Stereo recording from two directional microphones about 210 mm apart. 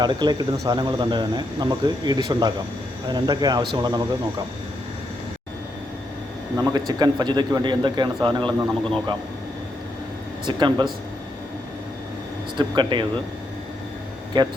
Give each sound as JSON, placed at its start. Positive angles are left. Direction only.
{"t": 0.0, "sound": "speech", "side_deg": -20}
{"t": 6.7, "sound": "speech", "side_deg": -20}
{"t": 8.4, "sound": "speech", "side_deg": 5}
{"t": 10.4, "sound": "speech", "side_deg": -20}
{"t": 12.5, "sound": "speech", "side_deg": -20}
{"t": 14.3, "sound": "speech", "side_deg": -20}